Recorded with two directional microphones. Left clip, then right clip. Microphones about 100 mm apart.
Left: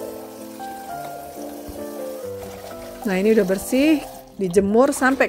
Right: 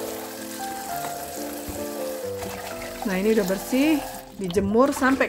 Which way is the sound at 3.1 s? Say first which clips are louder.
Left 5 dB; 60° left (ahead or behind).